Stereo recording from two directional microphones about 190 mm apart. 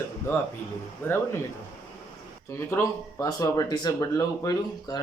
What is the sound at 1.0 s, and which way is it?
Speech, 10° left (ahead or behind).